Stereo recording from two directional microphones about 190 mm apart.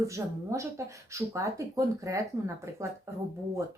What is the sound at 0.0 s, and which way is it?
Speech, 15° right (ahead or behind).